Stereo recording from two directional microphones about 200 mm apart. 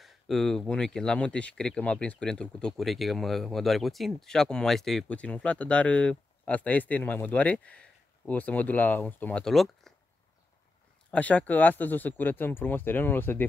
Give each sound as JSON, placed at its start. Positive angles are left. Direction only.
{"t": 0.0, "sound": "speech", "side_deg": 0}
{"t": 11.1, "sound": "speech", "side_deg": 5}